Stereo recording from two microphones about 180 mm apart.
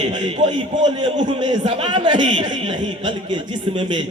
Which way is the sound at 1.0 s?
25° right (ahead or behind).